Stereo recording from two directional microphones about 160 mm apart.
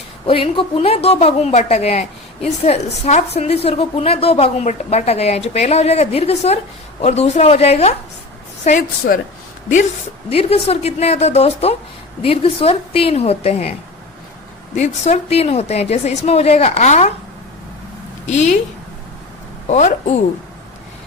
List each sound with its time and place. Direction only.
0.3 s a woman's voice: 35° left (ahead or behind)
8.6 s a woman's voice: 50° left (ahead or behind)
10.2 s a woman's voice: 40° left (ahead or behind)
14.8 s a woman's voice: 45° left (ahead or behind)
18.3 s a woman's voice: 45° left (ahead or behind)
19.6 s a woman's voice: 45° left (ahead or behind)